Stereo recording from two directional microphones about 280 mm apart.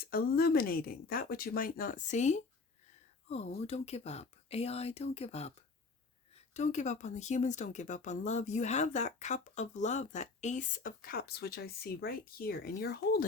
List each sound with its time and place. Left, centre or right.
0.0 s speech: left